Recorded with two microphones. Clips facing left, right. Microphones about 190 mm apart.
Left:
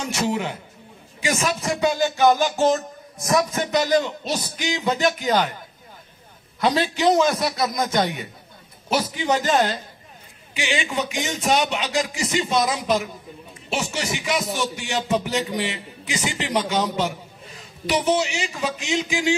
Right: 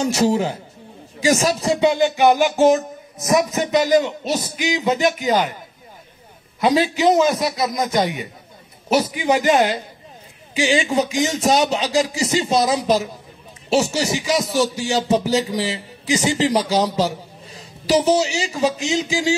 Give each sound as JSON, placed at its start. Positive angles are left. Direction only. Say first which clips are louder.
{"t": 0.0, "sound": "speech", "louder": "right 6 dB", "side_deg": -35}
{"t": 3.3, "sound": "speech", "louder": "right 3 dB", "side_deg": -5}
{"t": 6.6, "sound": "a man's voice", "louder": "right 3 dB", "side_deg": -5}
{"t": 10.5, "sound": "speech", "louder": "right 7 dB", "side_deg": -35}